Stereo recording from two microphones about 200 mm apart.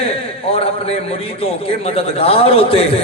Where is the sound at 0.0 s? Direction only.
30° left (ahead or behind).